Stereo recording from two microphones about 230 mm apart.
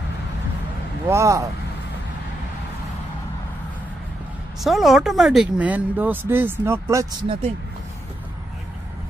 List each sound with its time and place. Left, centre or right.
1.0 s speech: centre
4.6 s speech: centre